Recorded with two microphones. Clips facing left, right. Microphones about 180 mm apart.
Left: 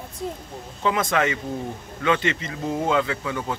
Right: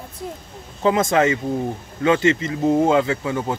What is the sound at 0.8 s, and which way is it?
Speech, 30° right (ahead or behind).